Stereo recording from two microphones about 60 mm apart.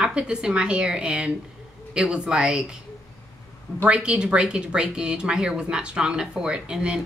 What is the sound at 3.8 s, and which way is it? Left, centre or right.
Speech, centre.